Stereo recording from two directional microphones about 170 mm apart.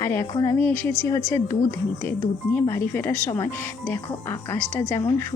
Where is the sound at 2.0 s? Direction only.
20° left (ahead or behind).